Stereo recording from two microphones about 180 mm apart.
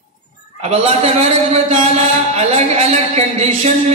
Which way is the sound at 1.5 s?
40° right (ahead or behind).